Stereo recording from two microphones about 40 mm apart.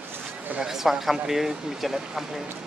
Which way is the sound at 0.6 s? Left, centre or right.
Centre.